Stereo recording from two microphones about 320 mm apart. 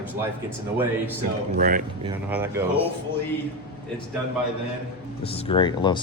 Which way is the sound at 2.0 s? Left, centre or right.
Centre.